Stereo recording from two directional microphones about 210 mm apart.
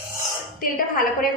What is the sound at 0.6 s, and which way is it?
Speech, 40° left (ahead or behind).